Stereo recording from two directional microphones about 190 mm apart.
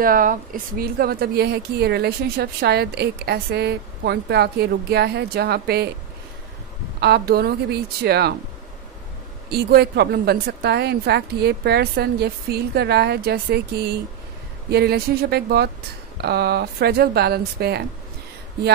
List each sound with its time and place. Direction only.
0.0 s speech: 45° right (ahead or behind)
7.0 s speech: 60° right (ahead or behind)
9.5 s speech: 55° right (ahead or behind)